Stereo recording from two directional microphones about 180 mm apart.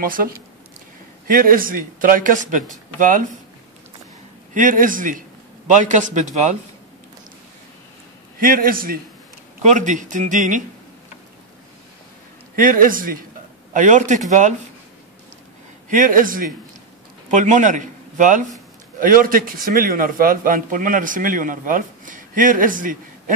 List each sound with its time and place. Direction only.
0.0 s a man's voice: 50° right (ahead or behind)
4.6 s a man's voice: 50° right (ahead or behind)
8.4 s a man's voice: 50° right (ahead or behind)
9.6 s a man's voice: 40° right (ahead or behind)
12.5 s a man's voice: 50° right (ahead or behind)
15.9 s a man's voice: 45° right (ahead or behind)